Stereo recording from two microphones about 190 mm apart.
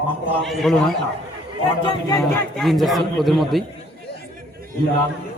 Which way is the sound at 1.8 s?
20° left (ahead or behind).